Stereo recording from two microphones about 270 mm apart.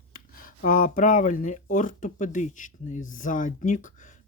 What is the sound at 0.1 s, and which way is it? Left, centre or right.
Speech, left.